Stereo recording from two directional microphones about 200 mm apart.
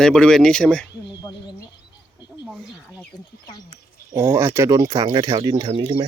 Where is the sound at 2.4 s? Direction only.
5° right (ahead or behind).